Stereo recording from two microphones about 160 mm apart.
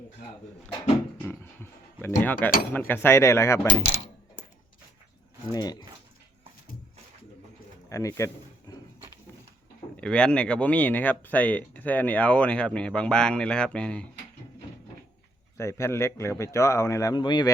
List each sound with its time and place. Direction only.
1.3 s a sound: 15° left (ahead or behind)
2.7 s speech: 10° left (ahead or behind)
7.9 s speech: 20° left (ahead or behind)
10.0 s speech: 5° left (ahead or behind)
15.5 s speech: 15° left (ahead or behind)